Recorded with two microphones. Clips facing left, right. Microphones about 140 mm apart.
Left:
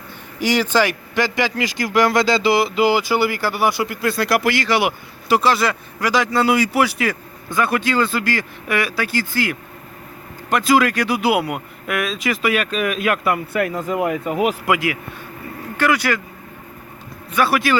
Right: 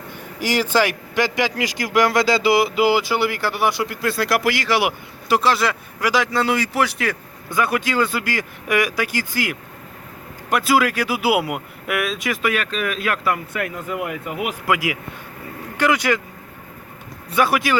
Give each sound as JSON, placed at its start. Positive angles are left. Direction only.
{"t": 0.3, "sound": "speech", "side_deg": -5}
{"t": 7.5, "sound": "speech", "side_deg": -10}
{"t": 13.5, "sound": "speech", "side_deg": 35}
{"t": 15.8, "sound": "speech", "side_deg": -20}
{"t": 17.3, "sound": "speech", "side_deg": -15}